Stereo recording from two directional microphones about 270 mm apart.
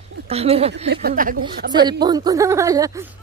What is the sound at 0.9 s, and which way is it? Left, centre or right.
Speech, right.